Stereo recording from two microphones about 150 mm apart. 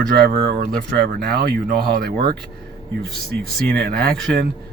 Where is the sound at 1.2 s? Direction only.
90° right.